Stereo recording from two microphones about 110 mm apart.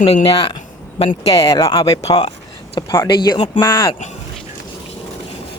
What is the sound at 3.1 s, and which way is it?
Speech, 45° left (ahead or behind).